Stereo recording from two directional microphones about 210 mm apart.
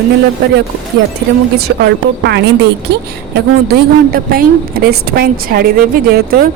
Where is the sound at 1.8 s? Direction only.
55° right (ahead or behind).